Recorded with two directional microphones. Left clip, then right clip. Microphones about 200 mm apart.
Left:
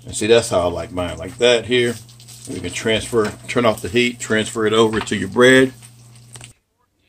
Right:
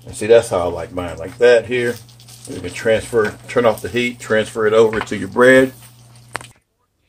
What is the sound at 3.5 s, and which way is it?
Speech, 65° left (ahead or behind).